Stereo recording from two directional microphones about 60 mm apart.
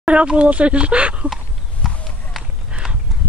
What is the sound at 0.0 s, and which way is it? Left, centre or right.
Speech, centre.